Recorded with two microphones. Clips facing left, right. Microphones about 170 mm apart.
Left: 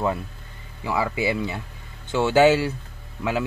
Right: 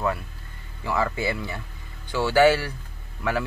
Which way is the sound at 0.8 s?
15° left (ahead or behind).